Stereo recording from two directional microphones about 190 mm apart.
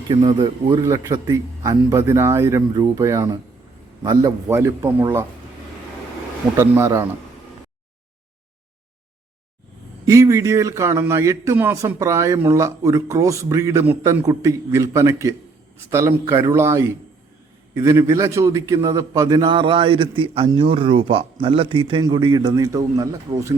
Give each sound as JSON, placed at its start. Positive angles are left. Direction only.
{"t": 0.1, "sound": "a man's voice", "side_deg": -25}
{"t": 6.6, "sound": "a man's voice", "side_deg": -15}
{"t": 10.1, "sound": "a man's voice", "side_deg": -15}